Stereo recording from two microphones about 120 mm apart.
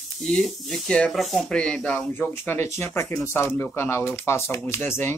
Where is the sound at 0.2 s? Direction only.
5° left (ahead or behind).